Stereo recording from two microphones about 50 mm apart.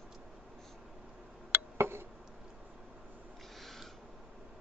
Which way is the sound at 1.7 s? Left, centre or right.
Right.